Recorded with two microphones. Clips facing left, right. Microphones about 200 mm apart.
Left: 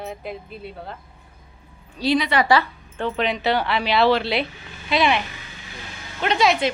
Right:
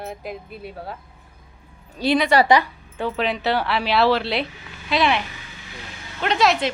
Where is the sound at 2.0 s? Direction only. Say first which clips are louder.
Right 1 dB; 55° right (ahead or behind).